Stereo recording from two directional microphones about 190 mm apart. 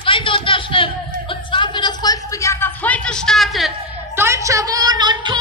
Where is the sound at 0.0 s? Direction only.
25° left (ahead or behind); by 3.7 s centre (ahead or behind).